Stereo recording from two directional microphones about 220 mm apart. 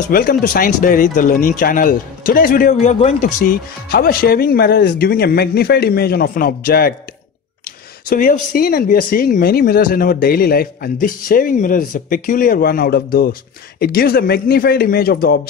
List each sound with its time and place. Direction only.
0.1 s speech: 40° left (ahead or behind)
8.1 s speech: 40° left (ahead or behind)